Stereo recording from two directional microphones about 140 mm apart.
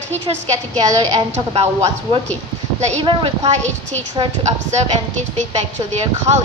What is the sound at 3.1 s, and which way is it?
Speech, 45° right (ahead or behind).